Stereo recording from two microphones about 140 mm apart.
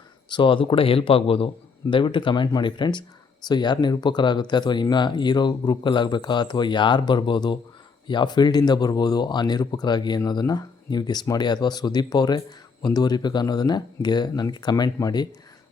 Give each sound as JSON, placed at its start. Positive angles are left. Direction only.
{"t": 0.3, "sound": "speech", "side_deg": 35}